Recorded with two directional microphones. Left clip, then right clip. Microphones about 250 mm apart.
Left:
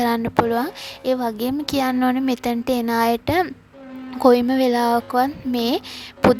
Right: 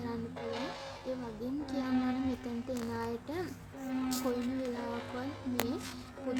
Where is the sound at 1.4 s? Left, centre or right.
Left.